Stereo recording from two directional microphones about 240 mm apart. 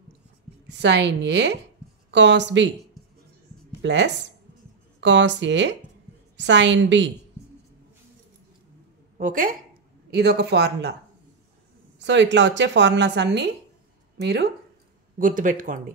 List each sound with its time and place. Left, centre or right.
0.7 s a woman's voice: right
3.8 s a woman's voice: right
9.2 s a woman's voice: right
12.0 s a woman's voice: right
15.1 s speech: right